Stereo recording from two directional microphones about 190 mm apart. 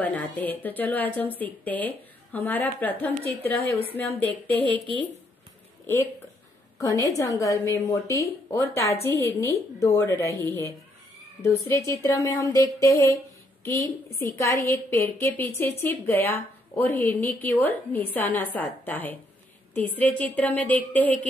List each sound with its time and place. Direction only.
0.0 s a woman's voice: 10° left (ahead or behind)
6.8 s a woman's voice: 15° left (ahead or behind)
14.4 s a woman's voice: 15° left (ahead or behind)